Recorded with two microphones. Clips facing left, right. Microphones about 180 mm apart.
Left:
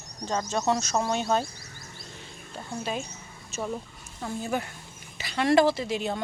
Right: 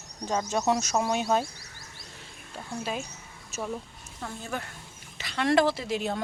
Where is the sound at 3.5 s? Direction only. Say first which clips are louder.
Left 1 dB; 5° left (ahead or behind).